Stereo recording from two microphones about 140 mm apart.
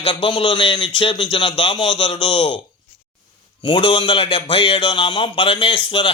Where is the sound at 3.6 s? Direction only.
35° left (ahead or behind).